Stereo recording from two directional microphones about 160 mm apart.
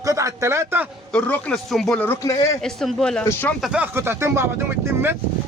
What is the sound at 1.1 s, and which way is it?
Speech, 5° left (ahead or behind).